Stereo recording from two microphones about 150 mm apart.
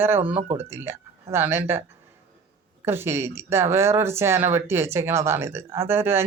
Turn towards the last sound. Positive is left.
turn(degrees=-15)  # may be behind; listen again after turning